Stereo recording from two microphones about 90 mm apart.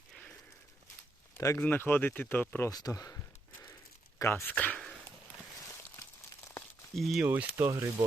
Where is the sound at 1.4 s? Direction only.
35° left (ahead or behind).